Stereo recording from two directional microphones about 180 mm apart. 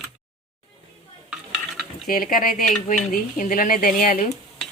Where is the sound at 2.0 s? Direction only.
50° left (ahead or behind).